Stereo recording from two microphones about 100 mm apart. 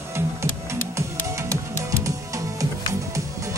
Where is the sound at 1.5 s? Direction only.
30° right (ahead or behind).